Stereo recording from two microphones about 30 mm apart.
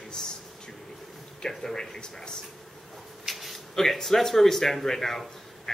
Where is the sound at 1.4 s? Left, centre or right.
Left.